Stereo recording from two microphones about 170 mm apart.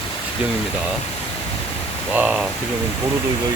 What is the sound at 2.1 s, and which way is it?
Speech, 10° right (ahead or behind).